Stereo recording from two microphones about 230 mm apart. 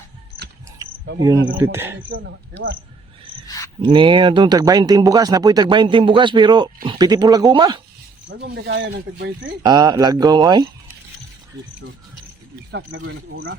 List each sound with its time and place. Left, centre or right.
1.2 s speech: centre
2.0 s speech: right
3.4 s cricket: centre
3.8 s speech: right
8.3 s speech: right
9.6 s speech: centre
12.7 s speech: right